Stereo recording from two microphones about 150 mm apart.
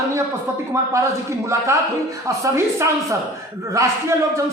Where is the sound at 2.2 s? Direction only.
20° right (ahead or behind).